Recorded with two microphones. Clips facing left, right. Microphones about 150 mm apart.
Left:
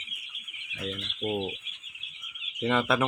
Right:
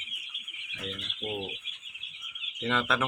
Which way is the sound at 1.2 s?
20° left (ahead or behind).